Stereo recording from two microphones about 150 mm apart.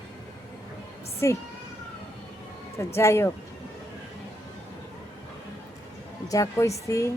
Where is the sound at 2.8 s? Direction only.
15° left (ahead or behind).